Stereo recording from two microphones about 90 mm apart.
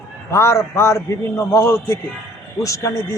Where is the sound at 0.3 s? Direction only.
35° left (ahead or behind).